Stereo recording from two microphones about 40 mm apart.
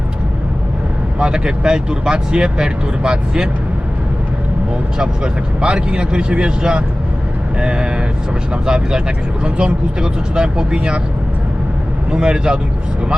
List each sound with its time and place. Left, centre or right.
1.2 s speech: centre
4.9 s speech: right
12.1 s speech: right